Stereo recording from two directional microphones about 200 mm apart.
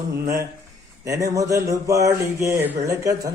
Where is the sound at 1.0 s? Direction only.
15° right (ahead or behind).